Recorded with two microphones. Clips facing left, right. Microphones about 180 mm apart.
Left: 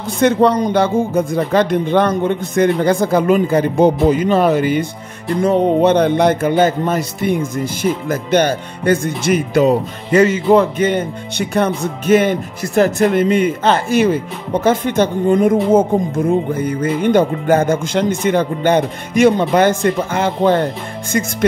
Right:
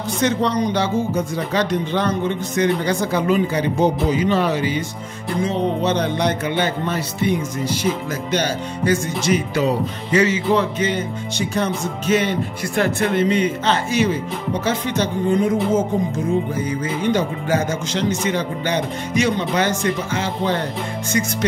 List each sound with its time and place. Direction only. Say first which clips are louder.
0.2 s speech: left 7 dB; 55° left (ahead or behind)